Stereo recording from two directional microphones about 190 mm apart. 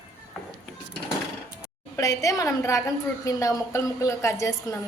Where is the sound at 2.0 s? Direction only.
15° left (ahead or behind).